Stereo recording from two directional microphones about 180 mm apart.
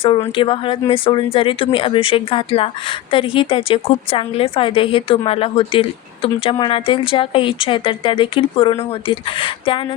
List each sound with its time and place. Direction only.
0.0 s speech: 30° left (ahead or behind)